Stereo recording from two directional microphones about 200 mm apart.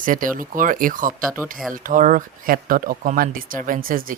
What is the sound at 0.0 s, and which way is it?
Speech, 40° right (ahead or behind).